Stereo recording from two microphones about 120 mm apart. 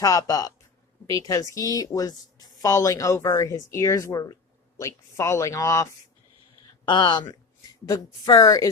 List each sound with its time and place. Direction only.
0.0 s a woman's voice: 30° left (ahead or behind)
6.8 s speech: 40° left (ahead or behind)
7.9 s a woman's voice: 30° left (ahead or behind)